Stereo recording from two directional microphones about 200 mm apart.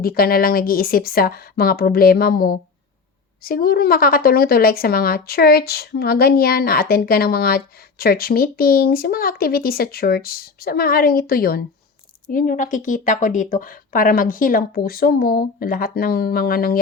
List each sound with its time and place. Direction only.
0.0 s a woman's voice: 50° left (ahead or behind)